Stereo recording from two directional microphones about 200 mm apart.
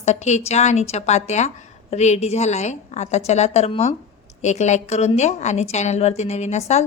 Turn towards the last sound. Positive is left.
turn(degrees=35)  # may be behind; listen again after turning